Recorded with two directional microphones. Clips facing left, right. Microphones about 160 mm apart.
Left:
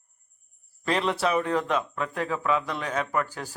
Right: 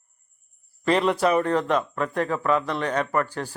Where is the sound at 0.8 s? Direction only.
Centre (ahead or behind).